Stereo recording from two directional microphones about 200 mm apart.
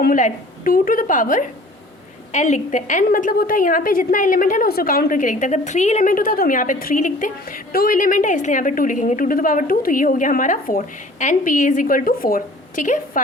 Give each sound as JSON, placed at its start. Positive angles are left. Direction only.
{"t": 0.0, "sound": "a woman's voice", "side_deg": 40}